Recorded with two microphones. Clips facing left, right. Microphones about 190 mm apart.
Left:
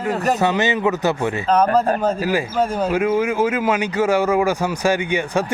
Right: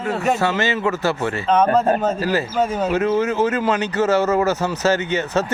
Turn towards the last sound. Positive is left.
turn(degrees=15)  # may be behind; listen again after turning